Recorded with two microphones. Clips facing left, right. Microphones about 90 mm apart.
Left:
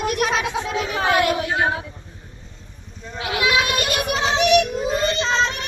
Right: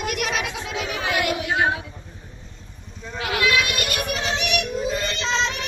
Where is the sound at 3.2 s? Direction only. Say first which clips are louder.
Left 1 dB; 20° left (ahead or behind).